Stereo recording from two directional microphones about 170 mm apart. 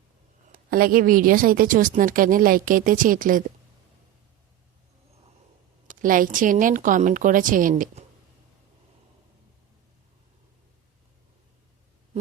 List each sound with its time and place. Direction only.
0.5 s a woman's voice: 60° right (ahead or behind)
5.9 s a woman's voice: 55° right (ahead or behind)